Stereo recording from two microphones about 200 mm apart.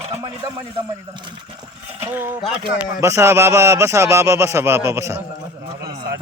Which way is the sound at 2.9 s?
15° right (ahead or behind).